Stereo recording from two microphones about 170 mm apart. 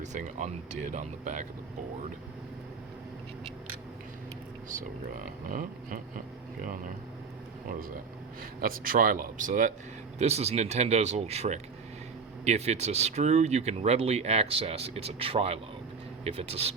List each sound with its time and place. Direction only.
0.0 s speech: 45° right (ahead or behind)
5.5 s a sound: 55° right (ahead or behind)
6.7 s speech: 55° right (ahead or behind)
8.6 s speech: 55° right (ahead or behind)
10.2 s speech: 40° right (ahead or behind)